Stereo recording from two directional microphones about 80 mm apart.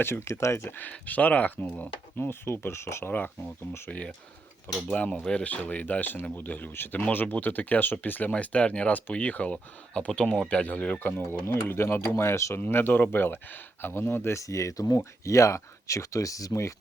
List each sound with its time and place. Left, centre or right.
0.0 s speech: left
0.8 s speech: centre
3.1 s speech: left
11.4 s speech: left